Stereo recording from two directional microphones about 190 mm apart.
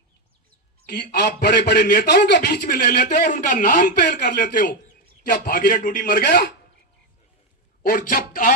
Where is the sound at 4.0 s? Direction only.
60° left (ahead or behind).